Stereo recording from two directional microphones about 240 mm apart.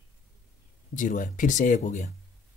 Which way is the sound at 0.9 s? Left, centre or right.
Left.